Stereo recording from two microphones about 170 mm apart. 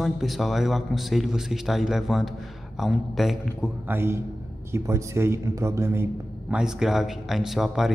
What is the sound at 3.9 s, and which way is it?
A man's voice, 15° right (ahead or behind).